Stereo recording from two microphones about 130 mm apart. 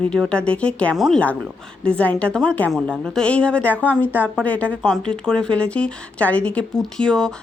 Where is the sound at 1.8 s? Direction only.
10° left (ahead or behind).